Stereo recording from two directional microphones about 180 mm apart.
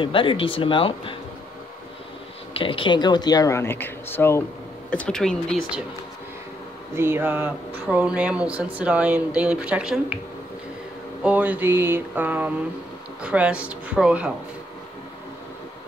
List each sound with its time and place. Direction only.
0.0 s speech: 30° left (ahead or behind)
2.6 s speech: 30° left (ahead or behind); by 5.8 s 5° left (ahead or behind)
7.0 s speech: 10° right (ahead or behind)
11.2 s speech: 10° right (ahead or behind)